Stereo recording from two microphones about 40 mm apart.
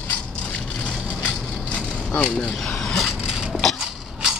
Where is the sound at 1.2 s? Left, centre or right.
Left.